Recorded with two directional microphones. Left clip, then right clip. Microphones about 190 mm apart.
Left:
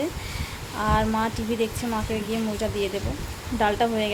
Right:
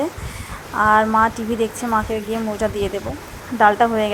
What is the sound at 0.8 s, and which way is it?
Speech, 5° right (ahead or behind).